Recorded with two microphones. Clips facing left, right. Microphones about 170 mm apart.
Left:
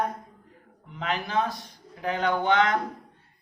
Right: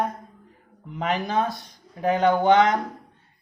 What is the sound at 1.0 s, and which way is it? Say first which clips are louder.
Speech: right 3 dB; 45° right (ahead or behind).